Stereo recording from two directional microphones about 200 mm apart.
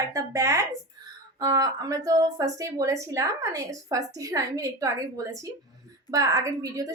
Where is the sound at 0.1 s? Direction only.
15° right (ahead or behind).